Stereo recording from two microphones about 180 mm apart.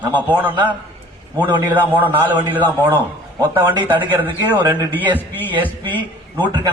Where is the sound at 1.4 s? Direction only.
25° right (ahead or behind).